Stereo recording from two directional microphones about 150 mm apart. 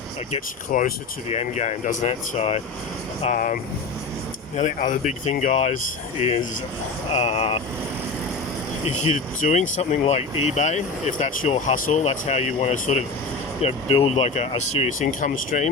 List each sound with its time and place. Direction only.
0.7 s speech: 60° left (ahead or behind)
3.2 s speech: 65° left (ahead or behind); by 7.6 s 40° left (ahead or behind)
9.4 s speech: 50° left (ahead or behind)
15.2 s speech: 55° left (ahead or behind)